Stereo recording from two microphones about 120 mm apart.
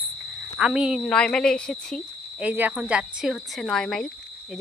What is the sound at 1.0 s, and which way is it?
Speech, 5° left (ahead or behind).